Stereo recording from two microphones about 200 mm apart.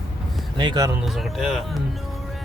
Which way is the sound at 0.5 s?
20° right (ahead or behind).